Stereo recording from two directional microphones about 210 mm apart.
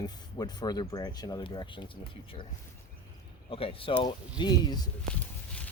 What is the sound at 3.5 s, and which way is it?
Speech, 25° left (ahead or behind).